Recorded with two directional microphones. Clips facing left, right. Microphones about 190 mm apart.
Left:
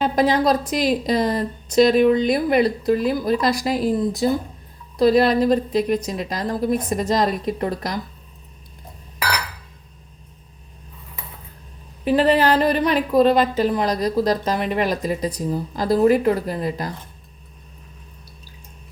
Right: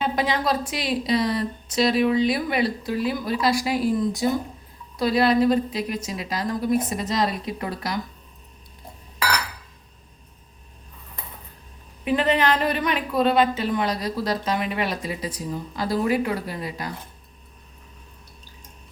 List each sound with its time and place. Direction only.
0.0 s a woman's voice: 40° left (ahead or behind)
4.9 s a woman's voice: 40° left (ahead or behind)
12.0 s a woman's voice: 35° left (ahead or behind)